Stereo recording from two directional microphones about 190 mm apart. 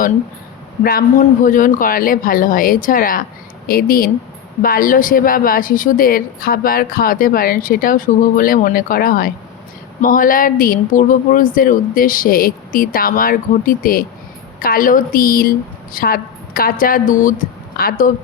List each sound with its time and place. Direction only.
1.5 s a woman's voice: 45° left (ahead or behind)